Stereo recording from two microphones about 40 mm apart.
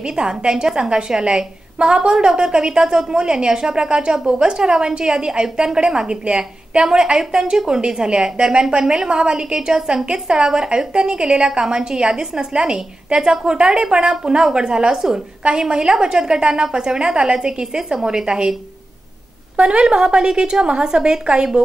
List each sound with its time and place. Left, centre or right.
0.0 s a woman's voice: right
19.7 s a woman's voice: right